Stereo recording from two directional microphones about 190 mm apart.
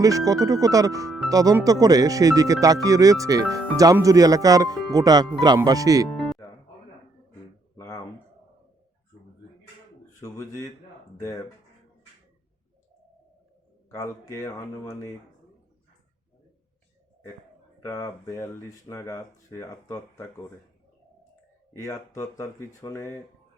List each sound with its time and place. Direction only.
0.0 s speech: 20° right (ahead or behind)
6.1 s music: centre (ahead or behind)
7.8 s a sound: 15° left (ahead or behind)
10.2 s speech: 15° left (ahead or behind)
13.9 s speech: 15° left (ahead or behind)
17.8 s speech: 15° left (ahead or behind)
21.8 s speech: 15° left (ahead or behind)